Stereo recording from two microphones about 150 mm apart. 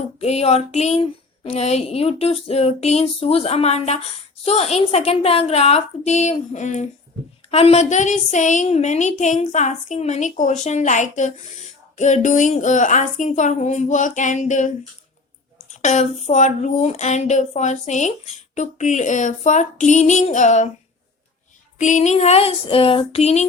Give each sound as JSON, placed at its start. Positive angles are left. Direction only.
{"t": 0.2, "sound": "a woman's voice", "side_deg": 45}
{"t": 15.7, "sound": "speech", "side_deg": 50}
{"t": 21.8, "sound": "speech", "side_deg": 55}